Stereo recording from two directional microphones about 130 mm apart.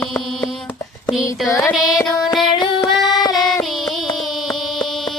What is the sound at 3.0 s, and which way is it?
Singing, 35° left (ahead or behind).